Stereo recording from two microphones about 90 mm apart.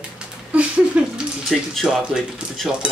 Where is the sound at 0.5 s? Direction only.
15° right (ahead or behind).